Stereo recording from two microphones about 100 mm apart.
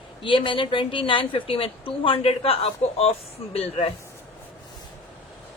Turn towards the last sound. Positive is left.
turn(degrees=70)  # may be behind; listen again after turning